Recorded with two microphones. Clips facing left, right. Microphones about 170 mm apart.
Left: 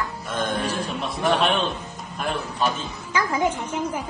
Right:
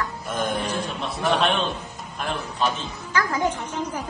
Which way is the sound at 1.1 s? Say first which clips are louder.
Left 1 dB; centre (ahead or behind).